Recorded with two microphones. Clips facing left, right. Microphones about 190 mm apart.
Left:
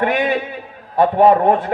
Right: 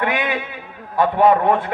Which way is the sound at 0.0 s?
40° left (ahead or behind).